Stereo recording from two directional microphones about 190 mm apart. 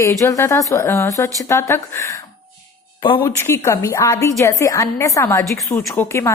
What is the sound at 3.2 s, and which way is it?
A woman's voice, 10° left (ahead or behind).